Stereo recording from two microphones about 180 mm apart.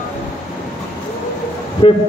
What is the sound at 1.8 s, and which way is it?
Speech, 25° left (ahead or behind).